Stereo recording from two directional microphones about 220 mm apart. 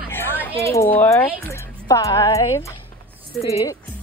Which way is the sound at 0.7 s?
10° left (ahead or behind).